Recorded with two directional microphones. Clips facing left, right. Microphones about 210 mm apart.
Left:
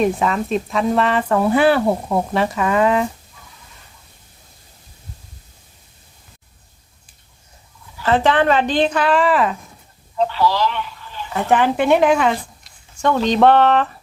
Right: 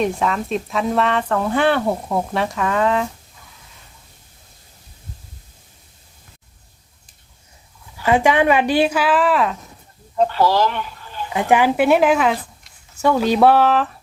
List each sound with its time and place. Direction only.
0.0 s speech: centre (ahead or behind)
8.0 s speech: 10° right (ahead or behind)
10.2 s speech: 45° right (ahead or behind)
11.3 s speech: 15° right (ahead or behind)